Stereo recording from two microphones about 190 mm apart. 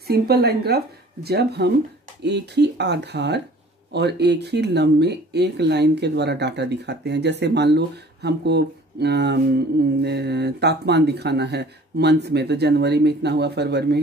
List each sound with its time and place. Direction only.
0.0 s speech: 55° right (ahead or behind)